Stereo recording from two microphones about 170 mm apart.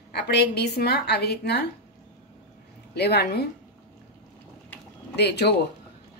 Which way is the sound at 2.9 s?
75° left (ahead or behind).